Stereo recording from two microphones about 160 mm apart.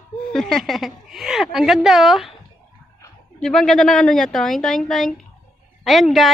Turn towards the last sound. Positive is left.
turn(degrees=0)  # may be behind; listen again after turning